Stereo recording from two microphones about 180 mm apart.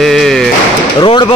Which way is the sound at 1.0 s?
30° left (ahead or behind).